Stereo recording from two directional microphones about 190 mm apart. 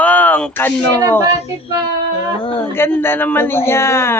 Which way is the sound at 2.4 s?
25° left (ahead or behind).